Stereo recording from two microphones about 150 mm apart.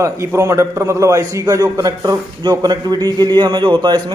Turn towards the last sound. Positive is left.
turn(degrees=-30)  # may be behind; listen again after turning